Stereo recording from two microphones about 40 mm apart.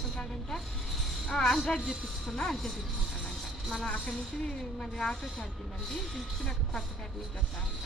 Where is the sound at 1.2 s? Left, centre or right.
Centre.